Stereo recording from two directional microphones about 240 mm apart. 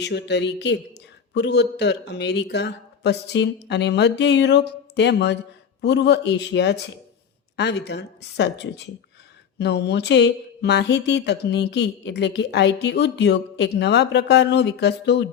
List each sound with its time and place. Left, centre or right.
0.0 s speech: left